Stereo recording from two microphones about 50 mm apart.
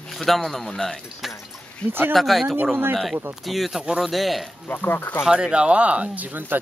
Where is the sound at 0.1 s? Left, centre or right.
Centre.